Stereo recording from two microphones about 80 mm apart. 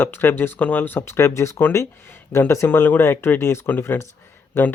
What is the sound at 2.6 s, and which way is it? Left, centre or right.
Speech, left.